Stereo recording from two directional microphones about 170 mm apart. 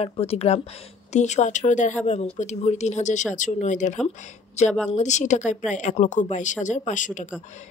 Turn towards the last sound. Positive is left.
turn(degrees=50)  # may be behind; listen again after turning